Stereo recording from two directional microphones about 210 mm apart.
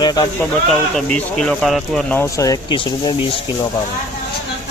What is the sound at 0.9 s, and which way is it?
Speech, 5° left (ahead or behind).